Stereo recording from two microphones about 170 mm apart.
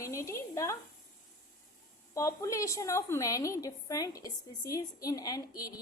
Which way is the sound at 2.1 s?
20° left (ahead or behind).